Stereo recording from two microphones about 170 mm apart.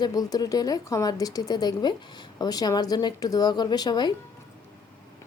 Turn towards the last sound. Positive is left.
turn(degrees=25)  # may be behind; listen again after turning